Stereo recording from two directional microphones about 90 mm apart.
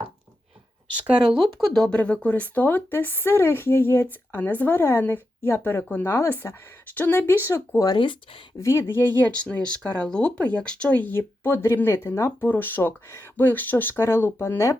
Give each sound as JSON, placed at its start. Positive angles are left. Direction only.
{"t": 1.0, "sound": "speech", "side_deg": -10}
{"t": 7.9, "sound": "speech", "side_deg": 65}
{"t": 8.5, "sound": "speech", "side_deg": 35}